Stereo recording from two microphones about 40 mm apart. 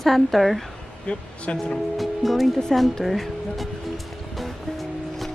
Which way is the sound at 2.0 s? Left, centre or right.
Centre.